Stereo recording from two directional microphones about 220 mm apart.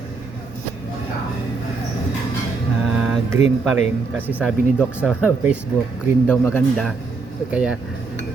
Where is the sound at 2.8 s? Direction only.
Centre (ahead or behind).